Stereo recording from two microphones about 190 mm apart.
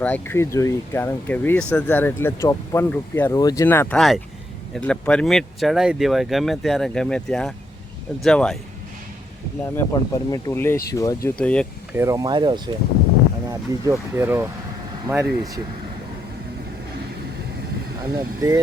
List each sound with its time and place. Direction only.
0.0 s speech: 10° left (ahead or behind)
9.7 s speech: 20° left (ahead or behind)
11.9 s speech: 15° right (ahead or behind)
18.1 s speech: 20° right (ahead or behind)